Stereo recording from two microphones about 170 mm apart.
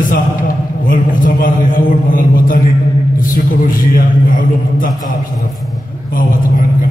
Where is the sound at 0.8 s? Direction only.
55° left (ahead or behind).